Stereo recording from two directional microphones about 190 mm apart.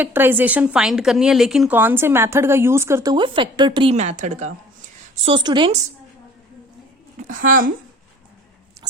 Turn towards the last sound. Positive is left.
turn(degrees=-45)  # may be behind; listen again after turning